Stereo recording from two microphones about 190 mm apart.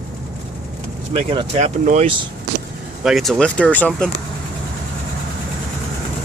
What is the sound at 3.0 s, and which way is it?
Speech, centre (ahead or behind).